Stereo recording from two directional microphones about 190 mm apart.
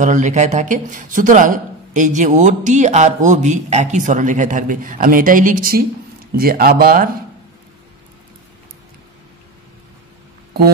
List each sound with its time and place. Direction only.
0.0 s speech: 40° right (ahead or behind)